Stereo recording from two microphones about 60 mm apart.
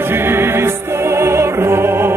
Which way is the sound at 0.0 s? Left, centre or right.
Right.